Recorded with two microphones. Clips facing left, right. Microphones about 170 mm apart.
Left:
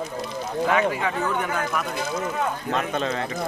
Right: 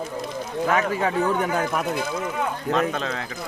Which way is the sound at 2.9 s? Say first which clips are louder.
Left 3 dB; centre (ahead or behind).